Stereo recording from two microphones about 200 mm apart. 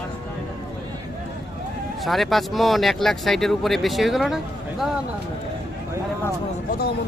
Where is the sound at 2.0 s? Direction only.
Centre (ahead or behind).